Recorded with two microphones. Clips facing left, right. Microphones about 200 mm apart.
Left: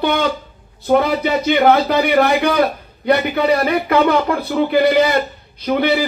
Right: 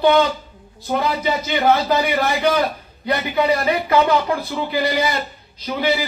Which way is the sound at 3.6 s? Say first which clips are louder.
Left 2 dB; 60° left (ahead or behind).